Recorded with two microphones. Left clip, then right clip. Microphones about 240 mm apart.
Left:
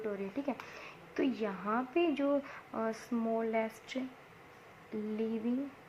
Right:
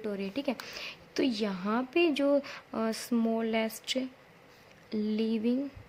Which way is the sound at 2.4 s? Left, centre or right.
Right.